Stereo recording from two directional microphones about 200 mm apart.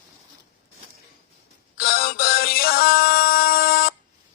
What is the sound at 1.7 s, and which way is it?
Music, 45° left (ahead or behind).